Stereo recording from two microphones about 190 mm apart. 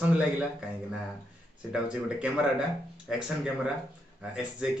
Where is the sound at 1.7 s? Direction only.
5° right (ahead or behind).